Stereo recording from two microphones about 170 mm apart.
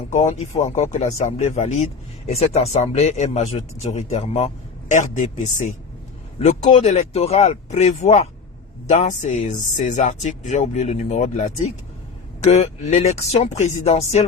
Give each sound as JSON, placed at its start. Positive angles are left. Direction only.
{"t": 0.1, "sound": "speech", "side_deg": 40}